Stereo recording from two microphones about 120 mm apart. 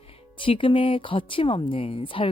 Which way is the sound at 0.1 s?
45° left (ahead or behind).